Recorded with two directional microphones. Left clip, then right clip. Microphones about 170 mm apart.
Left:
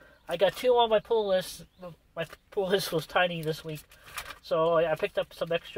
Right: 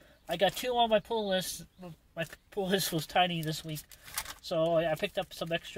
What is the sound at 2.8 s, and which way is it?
Speech, 5° right (ahead or behind).